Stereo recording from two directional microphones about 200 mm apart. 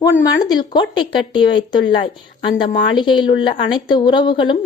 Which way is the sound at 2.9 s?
25° left (ahead or behind).